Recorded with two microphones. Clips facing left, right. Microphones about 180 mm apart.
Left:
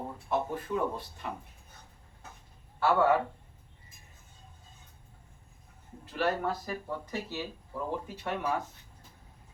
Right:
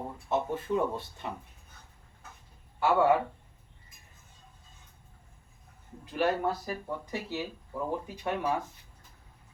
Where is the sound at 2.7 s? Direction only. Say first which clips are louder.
Right 1 dB; 15° right (ahead or behind).